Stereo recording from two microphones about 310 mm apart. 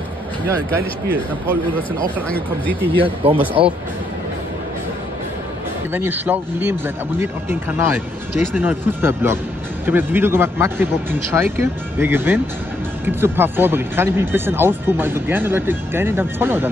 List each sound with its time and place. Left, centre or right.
0.5 s speech: centre
2.2 s speech: centre
3.0 s speech: centre
5.9 s speech: centre